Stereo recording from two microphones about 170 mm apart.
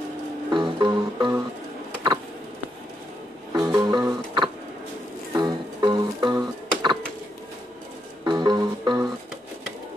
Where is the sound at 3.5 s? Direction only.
25° right (ahead or behind).